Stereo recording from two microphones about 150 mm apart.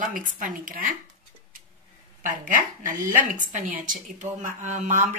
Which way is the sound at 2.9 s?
60° right (ahead or behind).